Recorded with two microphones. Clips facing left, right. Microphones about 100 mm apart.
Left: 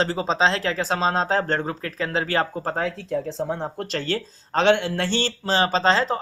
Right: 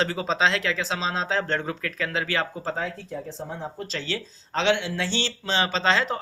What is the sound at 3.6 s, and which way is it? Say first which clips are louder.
Speech: left 5 dB; 50° left (ahead or behind).